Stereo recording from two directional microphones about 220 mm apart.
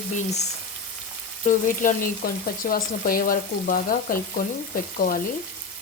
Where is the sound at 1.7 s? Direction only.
40° left (ahead or behind).